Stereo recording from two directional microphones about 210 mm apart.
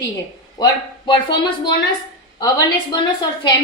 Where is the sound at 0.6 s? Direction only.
20° left (ahead or behind).